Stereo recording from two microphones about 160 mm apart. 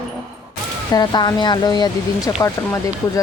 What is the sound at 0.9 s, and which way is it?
Speech, 25° left (ahead or behind).